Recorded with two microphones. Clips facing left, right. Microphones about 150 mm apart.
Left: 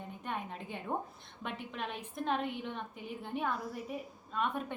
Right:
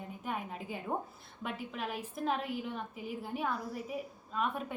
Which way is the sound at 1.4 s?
5° right (ahead or behind).